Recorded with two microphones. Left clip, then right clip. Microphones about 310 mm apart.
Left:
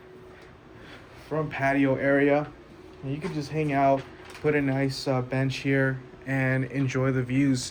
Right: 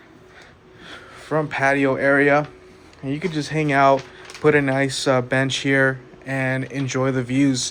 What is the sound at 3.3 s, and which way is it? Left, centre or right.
Speech, right.